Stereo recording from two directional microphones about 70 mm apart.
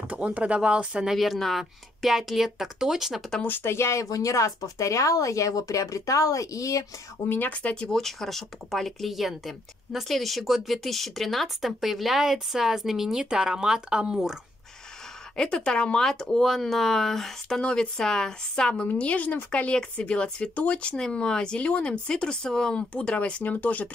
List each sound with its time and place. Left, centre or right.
0.1 s speech: right
1.1 s speech: centre
3.4 s speech: left
7.2 s speech: left
7.9 s speech: centre
15.3 s speech: centre